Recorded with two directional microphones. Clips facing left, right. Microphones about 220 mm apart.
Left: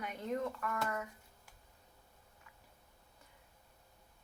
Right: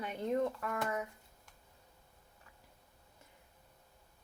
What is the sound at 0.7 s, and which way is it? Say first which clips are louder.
Speech: right 1 dB; 20° right (ahead or behind).